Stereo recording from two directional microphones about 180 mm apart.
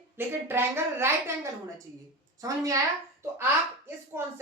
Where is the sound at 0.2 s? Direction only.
15° right (ahead or behind).